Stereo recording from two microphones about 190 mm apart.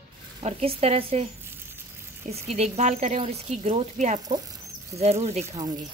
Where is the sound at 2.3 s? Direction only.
35° right (ahead or behind).